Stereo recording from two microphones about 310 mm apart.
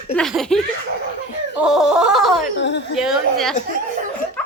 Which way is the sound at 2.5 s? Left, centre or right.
Left.